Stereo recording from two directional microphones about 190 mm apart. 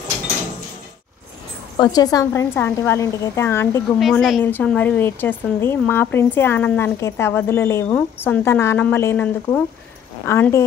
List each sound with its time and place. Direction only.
1.8 s speech: 20° left (ahead or behind)
4.0 s a woman's voice: centre (ahead or behind)
4.4 s speech: 10° left (ahead or behind)